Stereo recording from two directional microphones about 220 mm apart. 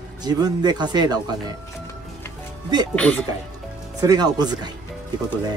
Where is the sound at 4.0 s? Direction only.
15° right (ahead or behind).